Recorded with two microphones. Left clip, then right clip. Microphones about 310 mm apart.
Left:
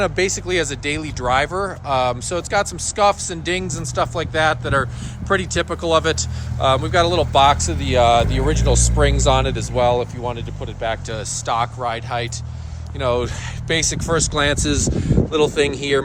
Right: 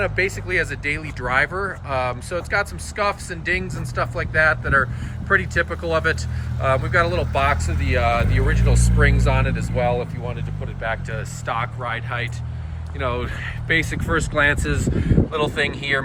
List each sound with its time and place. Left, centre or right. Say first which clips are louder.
0.2 s speech: left 2 dB; centre
9.8 s speech: left 5 dB; left
10.8 s speech: left 2 dB; centre